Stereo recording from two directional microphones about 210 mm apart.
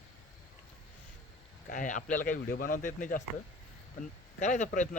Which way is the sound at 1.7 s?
40° left (ahead or behind).